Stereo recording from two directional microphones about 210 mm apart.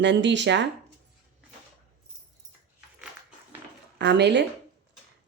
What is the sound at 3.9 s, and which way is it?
Speech, 55° right (ahead or behind).